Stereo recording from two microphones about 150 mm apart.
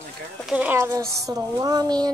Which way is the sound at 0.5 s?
10° right (ahead or behind).